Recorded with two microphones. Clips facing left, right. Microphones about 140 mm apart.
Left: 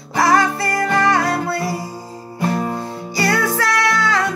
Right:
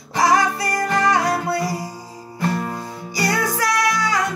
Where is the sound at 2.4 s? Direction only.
20° left (ahead or behind).